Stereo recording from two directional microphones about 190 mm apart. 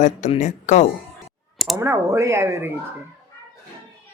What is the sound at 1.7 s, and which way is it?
Speech, 15° right (ahead or behind).